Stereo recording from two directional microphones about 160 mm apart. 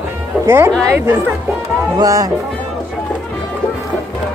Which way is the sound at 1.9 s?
20° right (ahead or behind).